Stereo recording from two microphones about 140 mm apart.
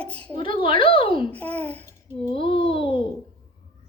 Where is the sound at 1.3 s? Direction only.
10° left (ahead or behind).